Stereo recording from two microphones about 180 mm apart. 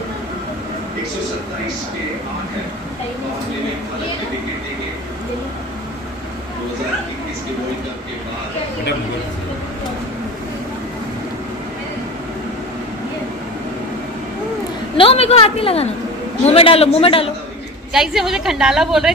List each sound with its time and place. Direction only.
15.0 s a woman's voice: 35° left (ahead or behind)
17.9 s a woman's voice: centre (ahead or behind)